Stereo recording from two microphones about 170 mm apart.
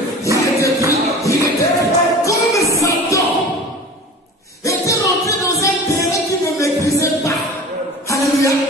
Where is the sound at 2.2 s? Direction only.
20° left (ahead or behind).